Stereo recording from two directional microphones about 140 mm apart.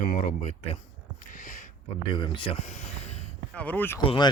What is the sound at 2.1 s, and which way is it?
Speech, 35° left (ahead or behind).